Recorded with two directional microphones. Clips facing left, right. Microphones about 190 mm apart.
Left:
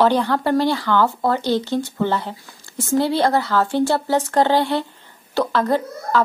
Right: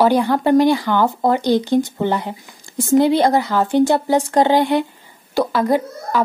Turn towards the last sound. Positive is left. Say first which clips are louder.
# right 1 dB
turn(degrees=-15)  # may be behind; listen again after turning